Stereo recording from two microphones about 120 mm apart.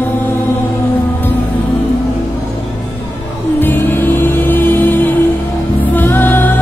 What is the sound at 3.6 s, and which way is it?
Music, 15° left (ahead or behind).